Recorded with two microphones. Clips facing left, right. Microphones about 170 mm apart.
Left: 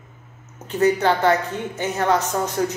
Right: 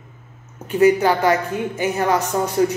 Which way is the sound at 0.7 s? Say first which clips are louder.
Right 3 dB; 10° right (ahead or behind).